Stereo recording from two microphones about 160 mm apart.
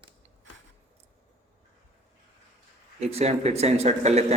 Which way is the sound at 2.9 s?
40° right (ahead or behind).